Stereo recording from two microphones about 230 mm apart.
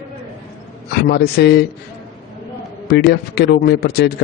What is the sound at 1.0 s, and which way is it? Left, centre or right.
Speech, left.